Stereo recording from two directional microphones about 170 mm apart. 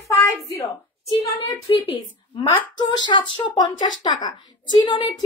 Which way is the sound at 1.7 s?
30° left (ahead or behind).